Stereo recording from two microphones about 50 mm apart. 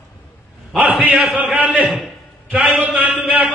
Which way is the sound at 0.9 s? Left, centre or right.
Centre.